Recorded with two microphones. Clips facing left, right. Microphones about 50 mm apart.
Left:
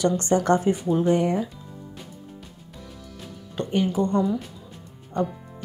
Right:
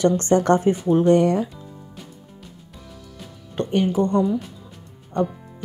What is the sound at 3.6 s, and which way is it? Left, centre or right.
Music, right.